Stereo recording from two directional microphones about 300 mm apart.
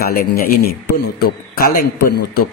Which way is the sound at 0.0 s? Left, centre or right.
Left.